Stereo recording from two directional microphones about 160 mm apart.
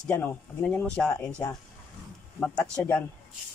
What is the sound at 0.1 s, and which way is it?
Speech, 10° left (ahead or behind).